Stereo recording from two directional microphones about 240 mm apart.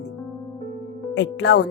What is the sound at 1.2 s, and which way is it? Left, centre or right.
Speech, left.